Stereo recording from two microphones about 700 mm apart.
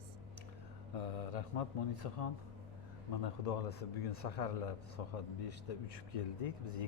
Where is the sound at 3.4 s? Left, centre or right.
Left.